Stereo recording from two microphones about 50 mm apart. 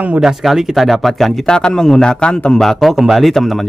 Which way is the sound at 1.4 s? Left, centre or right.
Centre.